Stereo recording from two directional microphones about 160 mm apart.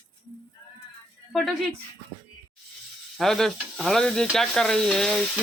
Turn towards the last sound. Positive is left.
turn(degrees=5)  # may be behind; listen again after turning